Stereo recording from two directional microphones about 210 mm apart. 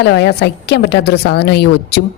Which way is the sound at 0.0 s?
55° left (ahead or behind).